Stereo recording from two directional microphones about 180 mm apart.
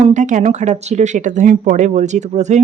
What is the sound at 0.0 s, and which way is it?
Speech, 40° right (ahead or behind).